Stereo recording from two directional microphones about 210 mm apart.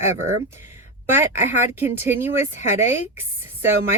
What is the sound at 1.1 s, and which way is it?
Speech, 10° right (ahead or behind).